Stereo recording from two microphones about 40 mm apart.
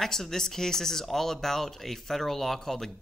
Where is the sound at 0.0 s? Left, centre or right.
Centre.